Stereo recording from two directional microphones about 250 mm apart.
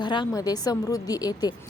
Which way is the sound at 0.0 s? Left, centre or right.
Centre.